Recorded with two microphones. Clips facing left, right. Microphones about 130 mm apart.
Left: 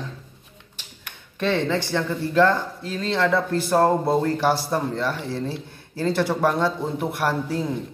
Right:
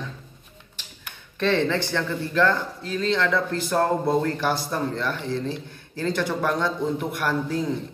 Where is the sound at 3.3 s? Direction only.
30° left (ahead or behind).